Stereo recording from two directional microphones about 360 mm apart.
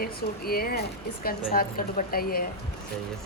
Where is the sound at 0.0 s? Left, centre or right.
Left.